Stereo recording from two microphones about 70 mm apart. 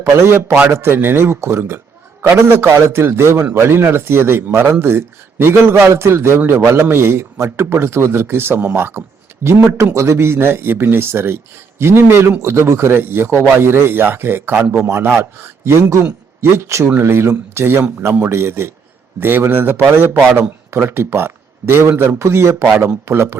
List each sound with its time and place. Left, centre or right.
0.0 s a man's voice: right
9.6 s speech: right
9.8 s a man's voice: right